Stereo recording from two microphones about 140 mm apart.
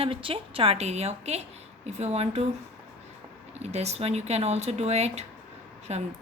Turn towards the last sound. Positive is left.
turn(degrees=-50)  # may be behind; listen again after turning